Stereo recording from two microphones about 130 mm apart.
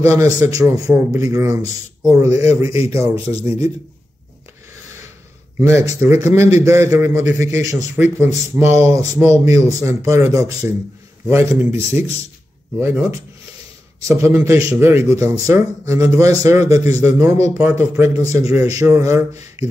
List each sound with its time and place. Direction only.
0.0 s a man's voice: 25° right (ahead or behind)
5.6 s a man's voice: 20° right (ahead or behind)
14.0 s a man's voice: 20° right (ahead or behind)